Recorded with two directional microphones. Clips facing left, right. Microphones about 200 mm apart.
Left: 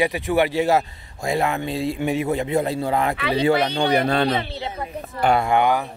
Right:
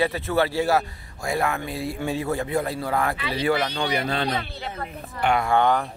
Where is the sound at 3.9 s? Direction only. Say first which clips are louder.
Left 6 dB; 55° left (ahead or behind).